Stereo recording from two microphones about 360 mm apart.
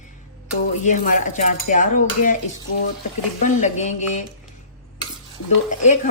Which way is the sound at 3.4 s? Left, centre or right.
Centre.